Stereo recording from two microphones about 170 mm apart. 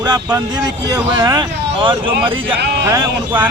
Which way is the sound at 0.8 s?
25° right (ahead or behind).